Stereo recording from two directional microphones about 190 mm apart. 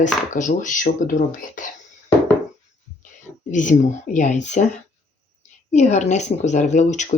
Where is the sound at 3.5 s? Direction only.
40° left (ahead or behind).